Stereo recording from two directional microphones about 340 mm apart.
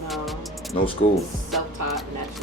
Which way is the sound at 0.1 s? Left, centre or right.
Centre.